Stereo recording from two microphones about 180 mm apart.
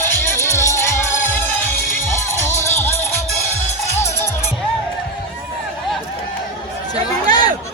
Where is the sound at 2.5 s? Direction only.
15° left (ahead or behind).